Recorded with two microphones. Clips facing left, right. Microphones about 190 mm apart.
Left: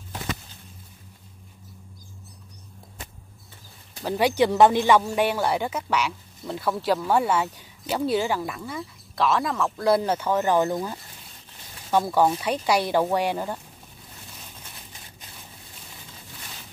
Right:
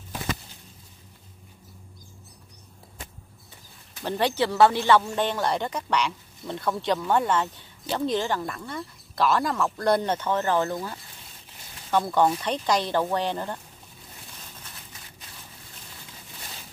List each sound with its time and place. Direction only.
4.0 s speech: 10° left (ahead or behind)
11.9 s speech: 5° left (ahead or behind)